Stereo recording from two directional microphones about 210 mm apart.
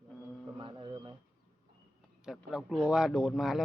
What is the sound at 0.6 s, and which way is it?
Music, 20° right (ahead or behind).